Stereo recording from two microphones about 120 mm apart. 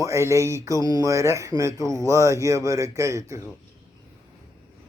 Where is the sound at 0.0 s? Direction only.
25° right (ahead or behind).